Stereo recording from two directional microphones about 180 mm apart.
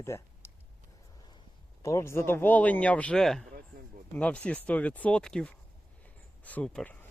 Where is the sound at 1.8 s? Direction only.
15° left (ahead or behind).